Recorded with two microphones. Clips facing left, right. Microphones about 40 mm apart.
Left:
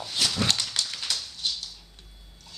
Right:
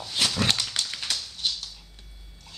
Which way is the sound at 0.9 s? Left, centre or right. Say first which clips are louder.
Right 1 dB; centre.